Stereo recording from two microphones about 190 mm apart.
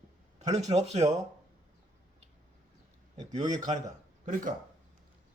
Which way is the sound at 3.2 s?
40° right (ahead or behind).